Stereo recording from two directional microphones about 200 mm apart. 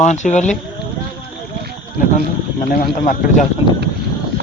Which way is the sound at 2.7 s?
45° left (ahead or behind).